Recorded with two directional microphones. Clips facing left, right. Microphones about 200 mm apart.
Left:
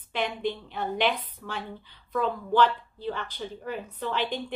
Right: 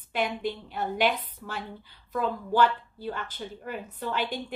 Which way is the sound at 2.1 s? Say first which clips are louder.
Left 1 dB; 5° right (ahead or behind).